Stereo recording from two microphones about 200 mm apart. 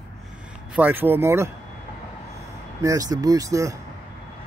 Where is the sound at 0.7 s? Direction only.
10° right (ahead or behind).